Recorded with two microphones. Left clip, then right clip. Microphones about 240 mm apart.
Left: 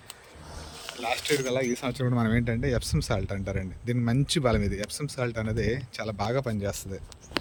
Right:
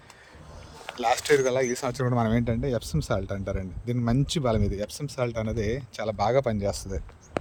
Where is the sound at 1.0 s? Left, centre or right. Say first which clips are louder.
Right 6 dB; right.